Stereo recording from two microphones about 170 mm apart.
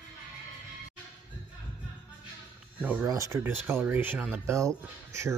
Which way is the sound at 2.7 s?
10° right (ahead or behind).